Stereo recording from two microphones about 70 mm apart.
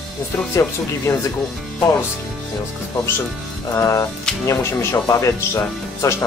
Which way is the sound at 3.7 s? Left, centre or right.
Left.